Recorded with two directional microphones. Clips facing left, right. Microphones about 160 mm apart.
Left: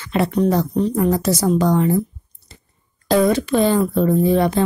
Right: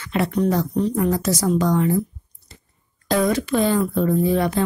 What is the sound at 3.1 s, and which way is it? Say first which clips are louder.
A woman's voice: left 4 dB; 30° left (ahead or behind).